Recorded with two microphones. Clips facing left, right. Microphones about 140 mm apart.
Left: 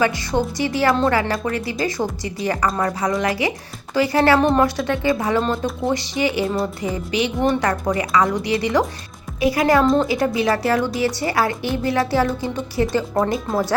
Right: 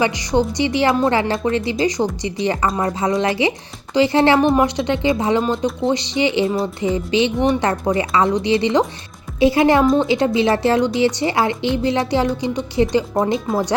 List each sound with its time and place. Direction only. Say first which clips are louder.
0.0 s a woman's voice: right 2 dB; 15° right (ahead or behind)
4.4 s speech: right 2 dB; 5° right (ahead or behind)
4.6 s a woman's voice: right 1 dB; 20° right (ahead or behind)
9.8 s speech: right 1 dB; centre (ahead or behind)
10.1 s a woman's voice: right 3 dB; 25° right (ahead or behind)